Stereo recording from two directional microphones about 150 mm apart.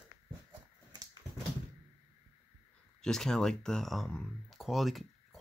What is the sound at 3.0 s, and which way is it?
Speech, 5° left (ahead or behind).